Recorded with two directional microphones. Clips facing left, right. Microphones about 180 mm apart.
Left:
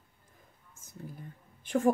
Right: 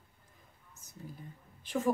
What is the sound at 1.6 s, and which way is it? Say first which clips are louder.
Speech: left 5 dB; 50° left (ahead or behind).